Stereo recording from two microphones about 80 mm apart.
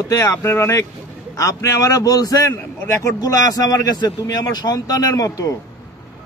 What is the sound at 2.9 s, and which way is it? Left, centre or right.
Speech, left.